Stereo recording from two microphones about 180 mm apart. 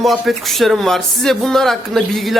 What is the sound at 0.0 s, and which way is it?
Speech, centre (ahead or behind).